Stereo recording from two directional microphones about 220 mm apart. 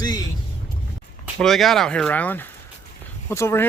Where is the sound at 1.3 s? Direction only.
Centre (ahead or behind).